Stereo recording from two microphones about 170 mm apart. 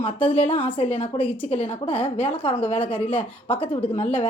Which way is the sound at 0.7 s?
35° left (ahead or behind).